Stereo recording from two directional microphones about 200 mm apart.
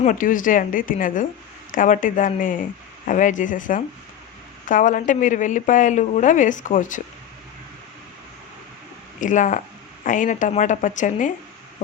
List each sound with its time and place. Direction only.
0.0 s speech: 40° left (ahead or behind)
9.2 s speech: 40° left (ahead or behind)